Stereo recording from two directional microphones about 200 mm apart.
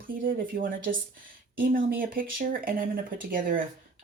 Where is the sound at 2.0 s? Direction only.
45° right (ahead or behind).